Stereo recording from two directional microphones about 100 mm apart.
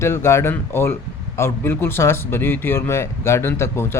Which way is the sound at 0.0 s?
25° left (ahead or behind).